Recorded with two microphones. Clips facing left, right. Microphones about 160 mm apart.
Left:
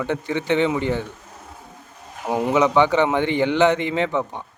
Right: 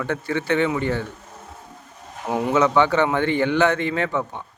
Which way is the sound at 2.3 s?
20° left (ahead or behind).